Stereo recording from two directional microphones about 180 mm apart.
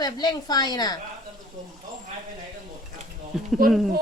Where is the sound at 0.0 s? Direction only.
20° left (ahead or behind).